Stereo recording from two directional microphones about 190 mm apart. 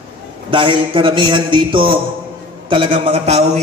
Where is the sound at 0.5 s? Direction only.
25° right (ahead or behind).